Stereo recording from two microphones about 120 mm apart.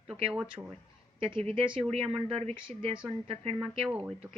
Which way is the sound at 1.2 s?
50° right (ahead or behind).